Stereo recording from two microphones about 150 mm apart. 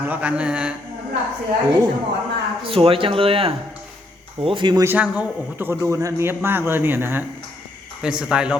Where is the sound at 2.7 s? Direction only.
40° right (ahead or behind).